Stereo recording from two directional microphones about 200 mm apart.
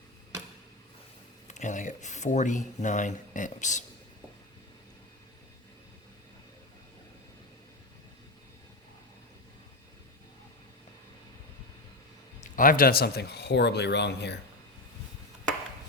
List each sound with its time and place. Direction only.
1.5 s speech: 35° left (ahead or behind)
12.4 s speech: 45° left (ahead or behind)